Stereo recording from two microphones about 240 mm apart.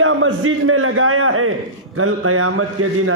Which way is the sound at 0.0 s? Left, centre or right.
Right.